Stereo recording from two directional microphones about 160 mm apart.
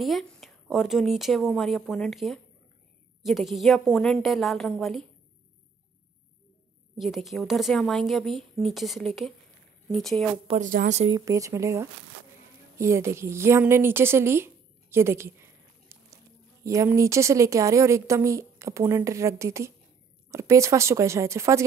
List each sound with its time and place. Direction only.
0.0 s a woman's voice: centre (ahead or behind)
7.0 s a woman's voice: centre (ahead or behind)
10.6 s speech: 55° right (ahead or behind)
11.1 s a woman's voice: 20° right (ahead or behind)